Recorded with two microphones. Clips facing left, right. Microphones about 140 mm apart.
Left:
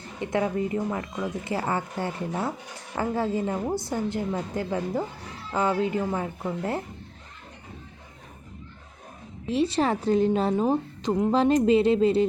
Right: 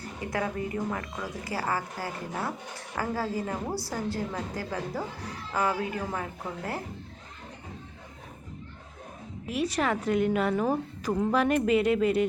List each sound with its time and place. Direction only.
0.0 s a woman's voice: 25° left (ahead or behind)
9.5 s a woman's voice: 30° left (ahead or behind)